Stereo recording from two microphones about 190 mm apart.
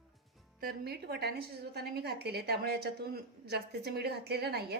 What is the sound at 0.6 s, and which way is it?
A woman's voice, 55° right (ahead or behind).